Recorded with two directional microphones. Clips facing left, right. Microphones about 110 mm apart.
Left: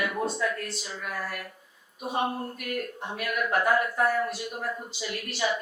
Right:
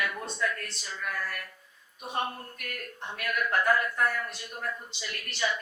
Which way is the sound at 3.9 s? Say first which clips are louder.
Left 4 dB; 25° left (ahead or behind).